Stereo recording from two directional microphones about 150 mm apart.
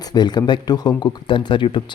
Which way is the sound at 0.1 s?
30° left (ahead or behind).